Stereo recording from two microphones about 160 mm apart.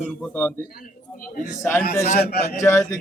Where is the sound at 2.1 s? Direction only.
70° left (ahead or behind).